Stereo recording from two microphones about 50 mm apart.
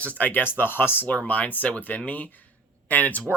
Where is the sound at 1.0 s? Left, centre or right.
Left.